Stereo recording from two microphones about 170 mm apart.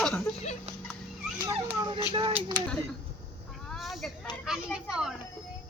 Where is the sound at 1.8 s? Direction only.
30° right (ahead or behind).